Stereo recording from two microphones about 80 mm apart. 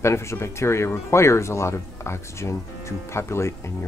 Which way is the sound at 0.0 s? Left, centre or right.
Left.